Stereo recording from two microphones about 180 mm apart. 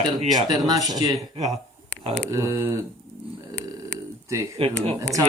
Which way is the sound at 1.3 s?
35° right (ahead or behind).